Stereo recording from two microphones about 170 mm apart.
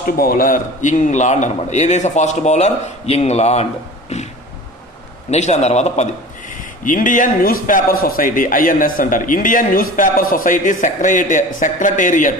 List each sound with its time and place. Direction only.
0.2 s a man's voice: 55° left (ahead or behind); by 3.6 s 40° left (ahead or behind)
4.1 s a sound: 40° left (ahead or behind)
5.3 s a man's voice: 40° left (ahead or behind)
6.5 s a man's voice: 50° left (ahead or behind)